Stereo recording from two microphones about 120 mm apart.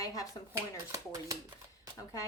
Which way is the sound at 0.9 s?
30° right (ahead or behind).